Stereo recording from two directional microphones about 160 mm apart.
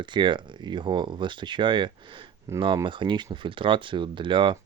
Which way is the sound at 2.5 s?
15° right (ahead or behind).